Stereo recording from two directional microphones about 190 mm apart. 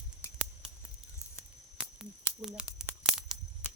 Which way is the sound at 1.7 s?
5° right (ahead or behind).